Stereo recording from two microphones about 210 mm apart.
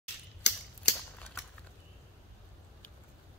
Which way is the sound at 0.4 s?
55° left (ahead or behind).